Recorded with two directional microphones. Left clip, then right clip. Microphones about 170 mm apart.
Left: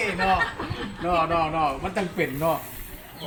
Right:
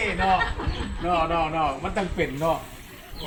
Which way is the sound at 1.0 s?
Centre (ahead or behind).